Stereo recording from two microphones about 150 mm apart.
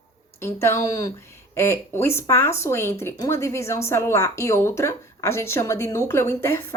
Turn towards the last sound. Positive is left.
turn(degrees=15)  # may be behind; listen again after turning